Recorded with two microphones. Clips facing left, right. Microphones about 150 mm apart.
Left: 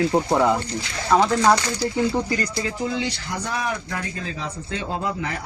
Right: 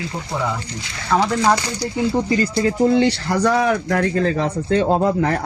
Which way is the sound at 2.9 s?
65° right (ahead or behind).